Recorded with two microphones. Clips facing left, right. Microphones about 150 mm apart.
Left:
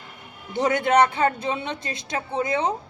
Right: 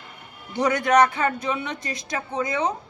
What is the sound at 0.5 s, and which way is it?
Speech, 25° left (ahead or behind).